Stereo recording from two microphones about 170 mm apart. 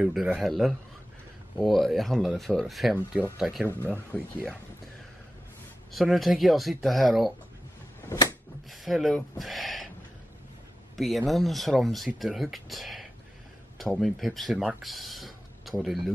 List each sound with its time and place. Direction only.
0.0 s speech: 5° right (ahead or behind)
3.6 s speech: 10° left (ahead or behind)
5.9 s speech: centre (ahead or behind)
8.1 s a sound: 15° left (ahead or behind)
8.6 s speech: centre (ahead or behind)
11.0 s speech: centre (ahead or behind)